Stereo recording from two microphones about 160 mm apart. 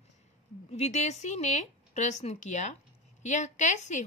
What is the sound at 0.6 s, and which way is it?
Speech, 45° left (ahead or behind).